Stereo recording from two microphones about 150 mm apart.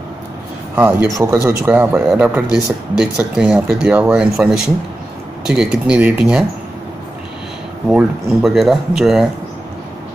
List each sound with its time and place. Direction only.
0.7 s speech: 15° right (ahead or behind)
7.9 s speech: centre (ahead or behind)